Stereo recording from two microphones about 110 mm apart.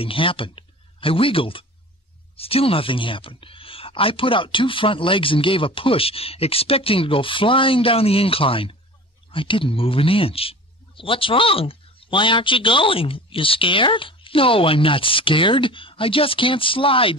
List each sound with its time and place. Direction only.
0.0 s speech: 55° left (ahead or behind)